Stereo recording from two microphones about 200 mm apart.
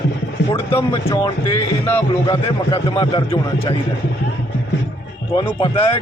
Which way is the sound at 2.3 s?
25° left (ahead or behind).